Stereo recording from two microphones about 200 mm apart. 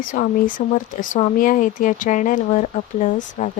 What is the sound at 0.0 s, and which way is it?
Speech, 40° left (ahead or behind).